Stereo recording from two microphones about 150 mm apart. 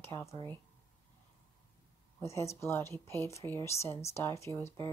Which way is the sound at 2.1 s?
20° left (ahead or behind).